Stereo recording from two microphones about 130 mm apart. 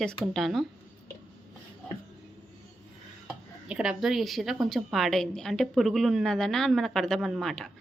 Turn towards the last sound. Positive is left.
turn(degrees=5)  # may be behind; listen again after turning